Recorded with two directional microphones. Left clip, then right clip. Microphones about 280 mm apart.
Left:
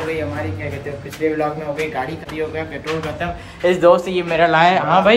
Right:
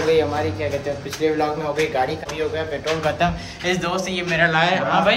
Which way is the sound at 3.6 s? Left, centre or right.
Centre.